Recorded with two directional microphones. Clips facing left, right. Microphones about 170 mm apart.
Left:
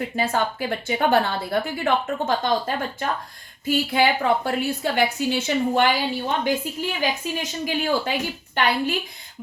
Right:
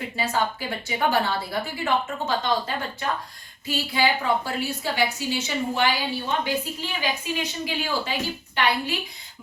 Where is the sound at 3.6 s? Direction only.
55° left (ahead or behind).